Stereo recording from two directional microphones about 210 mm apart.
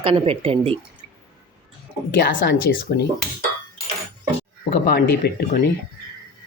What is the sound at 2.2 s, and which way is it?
Speech, 45° left (ahead or behind).